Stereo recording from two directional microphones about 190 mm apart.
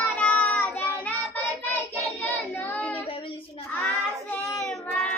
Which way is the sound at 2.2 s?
10° left (ahead or behind).